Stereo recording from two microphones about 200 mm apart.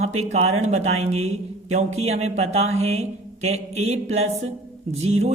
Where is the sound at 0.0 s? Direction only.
30° right (ahead or behind).